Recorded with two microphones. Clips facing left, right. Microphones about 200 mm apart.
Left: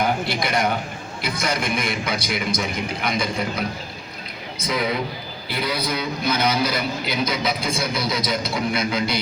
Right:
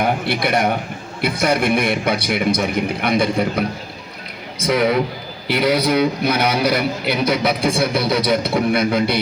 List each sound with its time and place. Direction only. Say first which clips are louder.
0.0 s a man's voice: right 3 dB; 60° right (ahead or behind)
4.6 s a man's voice: right 7 dB; 75° right (ahead or behind)